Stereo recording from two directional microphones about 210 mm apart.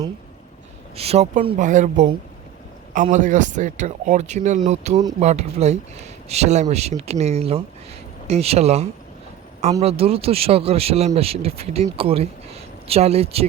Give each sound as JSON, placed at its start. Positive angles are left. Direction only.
{"t": 0.9, "sound": "speech", "side_deg": -30}